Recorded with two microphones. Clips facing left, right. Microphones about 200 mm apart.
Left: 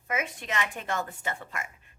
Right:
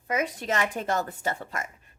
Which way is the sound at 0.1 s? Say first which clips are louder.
Right 5 dB; 35° right (ahead or behind).